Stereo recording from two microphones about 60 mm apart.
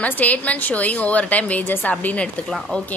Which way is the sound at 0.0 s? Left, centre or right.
Left.